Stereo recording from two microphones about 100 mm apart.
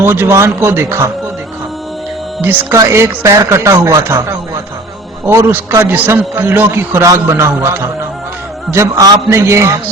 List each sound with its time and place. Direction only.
0.0 s a man's voice: 25° right (ahead or behind)
2.4 s a man's voice: 20° right (ahead or behind)